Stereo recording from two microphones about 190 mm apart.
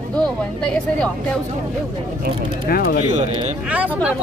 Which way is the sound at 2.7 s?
55° left (ahead or behind).